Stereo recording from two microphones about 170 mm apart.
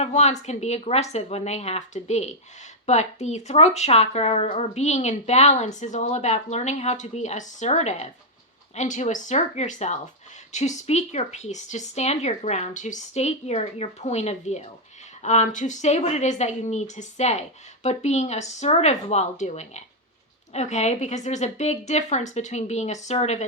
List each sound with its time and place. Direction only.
0.0 s speech: 40° left (ahead or behind)